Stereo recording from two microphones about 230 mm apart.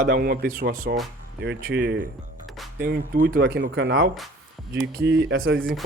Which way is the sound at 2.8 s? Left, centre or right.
Right.